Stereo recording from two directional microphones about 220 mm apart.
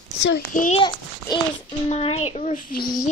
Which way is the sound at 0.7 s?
20° left (ahead or behind).